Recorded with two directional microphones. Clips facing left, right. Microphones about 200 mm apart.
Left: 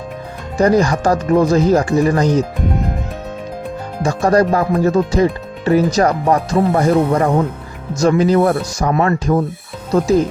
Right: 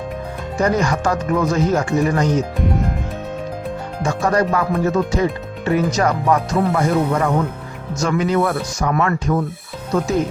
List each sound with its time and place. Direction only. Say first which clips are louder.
0.5 s speech: left 5 dB; 35° left (ahead or behind)
4.0 s speech: left 5 dB; 35° left (ahead or behind)